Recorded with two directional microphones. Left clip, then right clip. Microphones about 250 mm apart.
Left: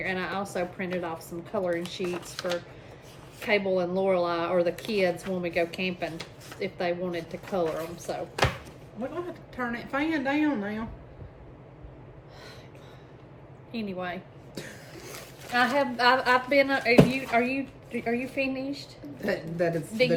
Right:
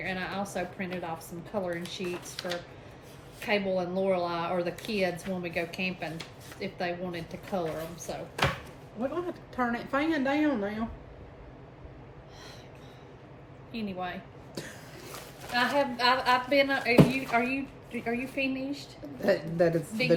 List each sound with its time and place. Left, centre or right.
0.0 s a woman's voice: centre
9.6 s a woman's voice: centre
13.7 s a woman's voice: centre
14.5 s a sound: centre
15.5 s a woman's voice: left
19.2 s a woman's voice: centre